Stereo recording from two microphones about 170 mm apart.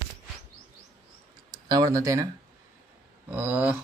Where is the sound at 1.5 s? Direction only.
20° right (ahead or behind).